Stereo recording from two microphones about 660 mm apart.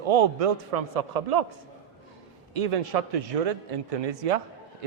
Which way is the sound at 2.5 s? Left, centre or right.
Right.